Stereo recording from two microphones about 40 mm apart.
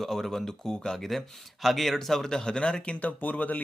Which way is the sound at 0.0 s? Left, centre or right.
Centre.